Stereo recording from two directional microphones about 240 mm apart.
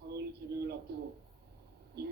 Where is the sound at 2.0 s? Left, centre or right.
Right.